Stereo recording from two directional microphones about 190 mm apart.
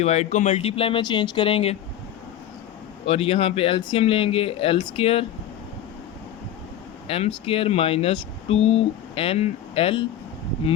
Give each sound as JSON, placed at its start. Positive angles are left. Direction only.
{"t": 0.0, "sound": "speech", "side_deg": 35}
{"t": 3.1, "sound": "speech", "side_deg": 30}
{"t": 7.1, "sound": "speech", "side_deg": 30}